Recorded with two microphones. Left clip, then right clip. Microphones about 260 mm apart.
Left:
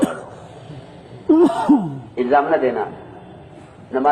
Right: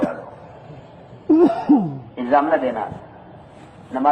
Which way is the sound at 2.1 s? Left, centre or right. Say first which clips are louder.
Left 1 dB; left.